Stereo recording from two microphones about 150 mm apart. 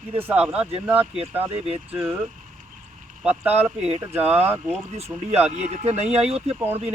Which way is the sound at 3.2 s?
10° right (ahead or behind).